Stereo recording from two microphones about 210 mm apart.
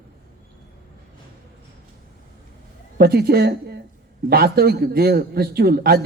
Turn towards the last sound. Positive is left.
turn(degrees=-50)  # may be behind; listen again after turning